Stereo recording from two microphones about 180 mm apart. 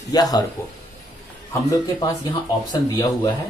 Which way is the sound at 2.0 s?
20° left (ahead or behind).